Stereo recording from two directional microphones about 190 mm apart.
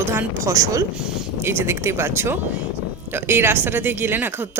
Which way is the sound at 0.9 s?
5° right (ahead or behind).